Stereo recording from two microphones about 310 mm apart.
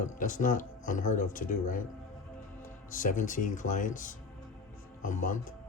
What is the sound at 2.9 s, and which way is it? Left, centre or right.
A man's voice, left.